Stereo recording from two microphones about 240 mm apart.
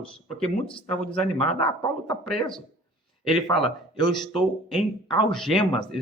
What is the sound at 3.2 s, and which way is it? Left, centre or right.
A man's voice, centre.